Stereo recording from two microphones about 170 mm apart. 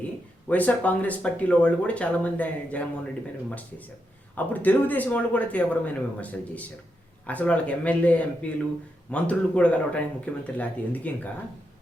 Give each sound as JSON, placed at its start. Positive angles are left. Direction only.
{"t": 0.4, "sound": "speech", "side_deg": 10}
{"t": 4.4, "sound": "speech", "side_deg": 10}